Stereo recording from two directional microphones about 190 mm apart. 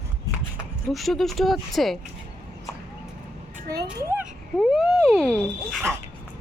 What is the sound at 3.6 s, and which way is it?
Speech, 20° right (ahead or behind).